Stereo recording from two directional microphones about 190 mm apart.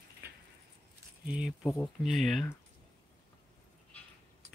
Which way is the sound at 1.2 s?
5° right (ahead or behind).